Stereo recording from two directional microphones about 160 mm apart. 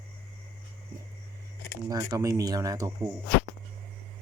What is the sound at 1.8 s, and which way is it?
Speech, 20° right (ahead or behind).